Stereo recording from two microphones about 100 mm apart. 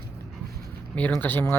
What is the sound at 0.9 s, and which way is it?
Speech, 15° left (ahead or behind).